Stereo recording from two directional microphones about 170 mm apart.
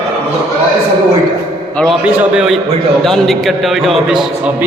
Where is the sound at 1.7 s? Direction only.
5° left (ahead or behind).